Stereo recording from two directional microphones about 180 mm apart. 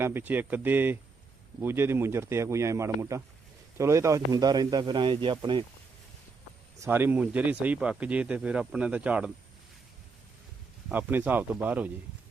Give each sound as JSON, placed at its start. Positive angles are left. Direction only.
{"t": 0.0, "sound": "a man's voice", "side_deg": -10}
{"t": 6.7, "sound": "speech", "side_deg": -15}
{"t": 10.8, "sound": "speech", "side_deg": -10}